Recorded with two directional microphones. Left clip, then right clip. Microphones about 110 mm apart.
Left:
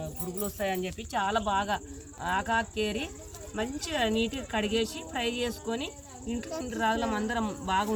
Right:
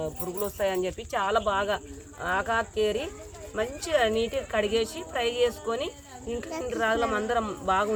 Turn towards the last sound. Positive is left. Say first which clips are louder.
# right 4 dB
turn(degrees=-40)  # may be behind; listen again after turning